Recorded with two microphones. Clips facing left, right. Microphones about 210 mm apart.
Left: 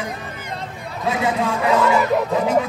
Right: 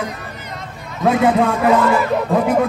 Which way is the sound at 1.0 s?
55° right (ahead or behind).